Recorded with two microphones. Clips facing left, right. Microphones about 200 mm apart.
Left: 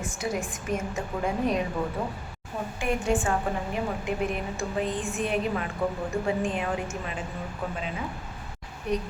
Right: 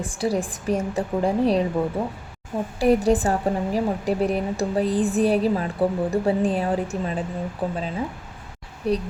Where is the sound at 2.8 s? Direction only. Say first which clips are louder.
Right 8 dB; 35° right (ahead or behind).